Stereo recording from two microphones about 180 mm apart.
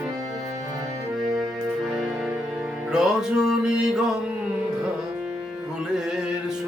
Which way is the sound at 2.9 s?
Centre (ahead or behind).